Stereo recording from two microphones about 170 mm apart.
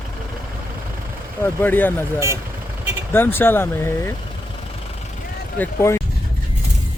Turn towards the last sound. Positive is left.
turn(degrees=15)  # may be behind; listen again after turning